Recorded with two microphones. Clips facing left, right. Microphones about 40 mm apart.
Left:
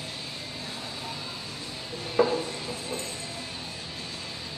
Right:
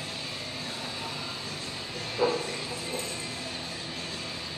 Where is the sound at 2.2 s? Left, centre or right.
Left.